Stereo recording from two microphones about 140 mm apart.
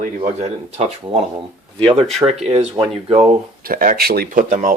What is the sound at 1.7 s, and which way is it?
Speech, 40° right (ahead or behind).